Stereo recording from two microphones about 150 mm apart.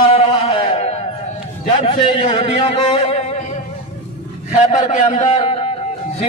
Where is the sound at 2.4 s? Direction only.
45° left (ahead or behind).